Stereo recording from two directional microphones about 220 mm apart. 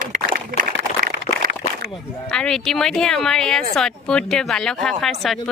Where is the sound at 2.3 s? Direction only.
5° left (ahead or behind).